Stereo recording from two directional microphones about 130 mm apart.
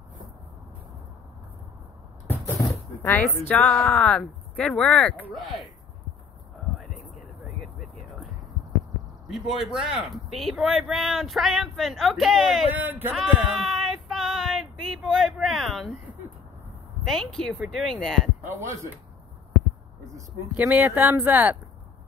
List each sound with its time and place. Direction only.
2.2 s speech: 15° left (ahead or behind); by 5.7 s centre (ahead or behind)
7.2 s vehicle: centre (ahead or behind)
9.3 s speech: 5° right (ahead or behind)
12.7 s speech: 15° right (ahead or behind)
13.7 s child singing: centre (ahead or behind)
17.0 s speech: 5° left (ahead or behind)
18.4 s a sound: 20° right (ahead or behind)
20.5 s speech: 10° right (ahead or behind)